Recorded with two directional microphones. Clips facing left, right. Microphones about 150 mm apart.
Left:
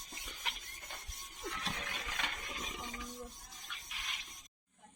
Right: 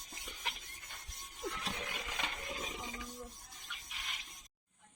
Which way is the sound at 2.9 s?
Centre (ahead or behind).